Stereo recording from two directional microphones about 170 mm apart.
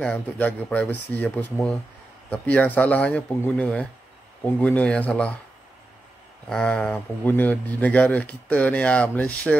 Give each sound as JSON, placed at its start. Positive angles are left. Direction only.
{"t": 0.0, "sound": "speech", "side_deg": 10}
{"t": 6.5, "sound": "speech", "side_deg": 5}